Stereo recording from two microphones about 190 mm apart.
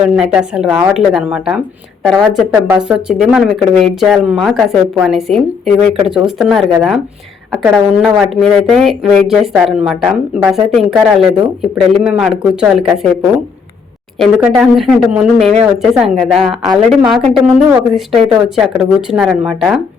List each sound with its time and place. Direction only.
0.0 s speech: 5° right (ahead or behind)
14.2 s speech: centre (ahead or behind)